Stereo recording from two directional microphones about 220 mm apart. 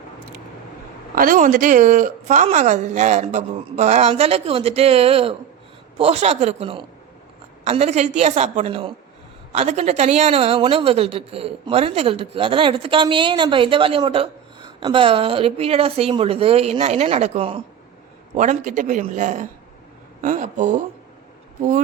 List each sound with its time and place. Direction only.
1.1 s a woman's voice: 40° right (ahead or behind)